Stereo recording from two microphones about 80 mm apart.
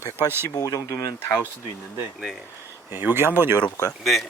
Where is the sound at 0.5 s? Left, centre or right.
Left.